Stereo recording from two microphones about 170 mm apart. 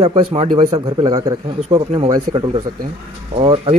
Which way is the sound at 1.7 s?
35° right (ahead or behind).